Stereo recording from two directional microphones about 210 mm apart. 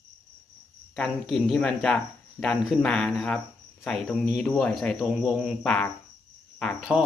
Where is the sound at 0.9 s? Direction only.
Centre (ahead or behind).